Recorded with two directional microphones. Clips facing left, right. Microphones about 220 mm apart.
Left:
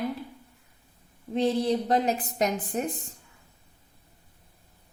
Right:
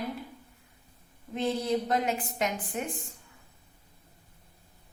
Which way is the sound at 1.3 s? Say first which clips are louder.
Left 4 dB; 30° left (ahead or behind).